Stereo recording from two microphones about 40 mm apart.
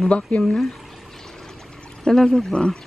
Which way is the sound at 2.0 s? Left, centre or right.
Centre.